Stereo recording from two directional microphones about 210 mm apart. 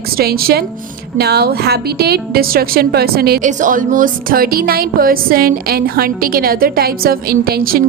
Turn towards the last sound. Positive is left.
turn(degrees=-45)  # may be behind; listen again after turning